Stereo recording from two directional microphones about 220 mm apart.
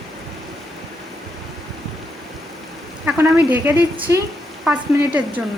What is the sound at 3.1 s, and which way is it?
Speech, 10° right (ahead or behind).